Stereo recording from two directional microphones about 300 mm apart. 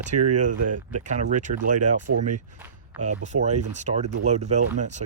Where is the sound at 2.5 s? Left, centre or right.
Centre.